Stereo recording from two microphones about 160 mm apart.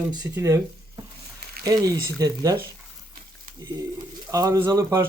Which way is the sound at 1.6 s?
20° right (ahead or behind).